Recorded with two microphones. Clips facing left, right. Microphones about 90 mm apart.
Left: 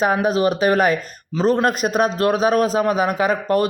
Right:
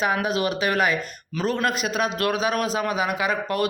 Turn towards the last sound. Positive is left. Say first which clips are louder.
# left 6 dB
turn(degrees=40)  # may be behind; listen again after turning